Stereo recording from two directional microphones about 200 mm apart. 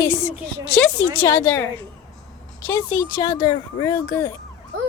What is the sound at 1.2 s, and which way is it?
A woman's voice, 10° left (ahead or behind).